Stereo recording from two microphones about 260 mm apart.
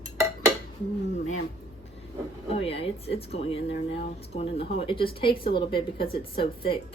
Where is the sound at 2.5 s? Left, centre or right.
Left.